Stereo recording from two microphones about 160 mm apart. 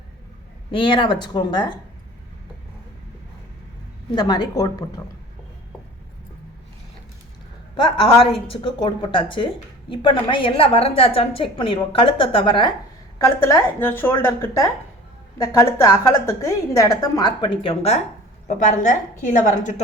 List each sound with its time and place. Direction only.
0.7 s a woman's voice: 30° left (ahead or behind)
4.1 s a woman's voice: 25° left (ahead or behind)
7.9 s a woman's voice: 35° left (ahead or behind)
13.1 s a woman's voice: 20° left (ahead or behind); by 18.0 s 35° left (ahead or behind)
18.4 s a woman's voice: 50° left (ahead or behind)